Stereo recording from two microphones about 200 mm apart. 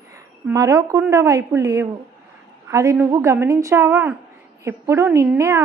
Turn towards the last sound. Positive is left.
turn(degrees=-15)  # may be behind; listen again after turning